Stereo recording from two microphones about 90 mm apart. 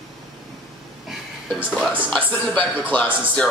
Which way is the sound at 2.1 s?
15° left (ahead or behind).